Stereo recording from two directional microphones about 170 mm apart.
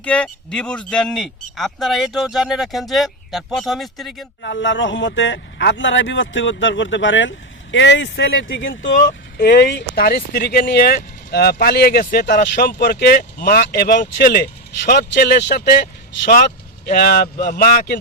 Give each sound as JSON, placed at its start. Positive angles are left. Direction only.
{"t": 0.0, "sound": "speech", "side_deg": 5}
{"t": 4.4, "sound": "speech", "side_deg": 90}
{"t": 9.4, "sound": "speech", "side_deg": 80}
{"t": 16.3, "sound": "speech", "side_deg": 60}